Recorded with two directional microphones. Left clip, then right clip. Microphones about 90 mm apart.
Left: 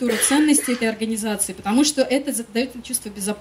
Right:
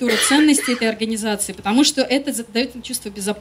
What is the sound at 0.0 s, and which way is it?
Speech, 50° right (ahead or behind).